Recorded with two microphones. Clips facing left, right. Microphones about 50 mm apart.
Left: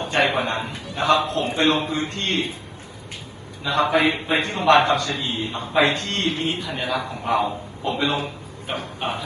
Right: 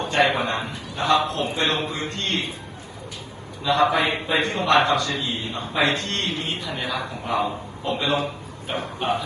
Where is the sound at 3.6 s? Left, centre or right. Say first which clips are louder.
Right 2 dB; right.